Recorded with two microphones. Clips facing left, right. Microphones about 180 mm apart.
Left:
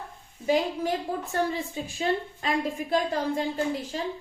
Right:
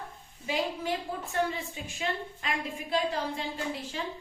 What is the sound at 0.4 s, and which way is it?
A woman's voice, 45° left (ahead or behind).